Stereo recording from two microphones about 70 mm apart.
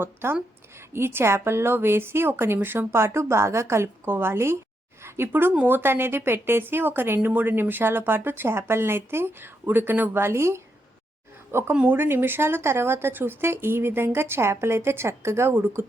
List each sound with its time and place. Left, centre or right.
0.0 s a woman's voice: right
11.7 s a woman's voice: right